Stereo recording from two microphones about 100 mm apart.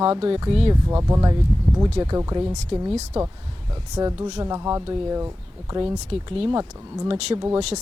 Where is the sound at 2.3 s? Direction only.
45° right (ahead or behind).